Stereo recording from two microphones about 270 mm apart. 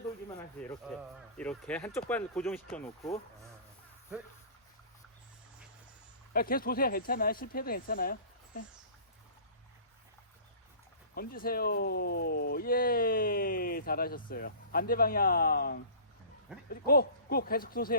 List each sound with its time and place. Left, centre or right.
1.4 s speech: centre
6.3 s speech: left
11.1 s speech: left